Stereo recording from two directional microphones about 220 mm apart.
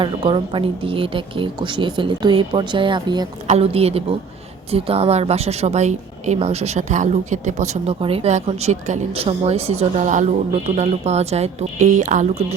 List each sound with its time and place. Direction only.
0.0 s a woman's voice: 25° right (ahead or behind)